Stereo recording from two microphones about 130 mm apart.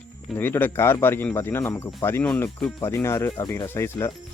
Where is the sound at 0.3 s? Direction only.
15° left (ahead or behind).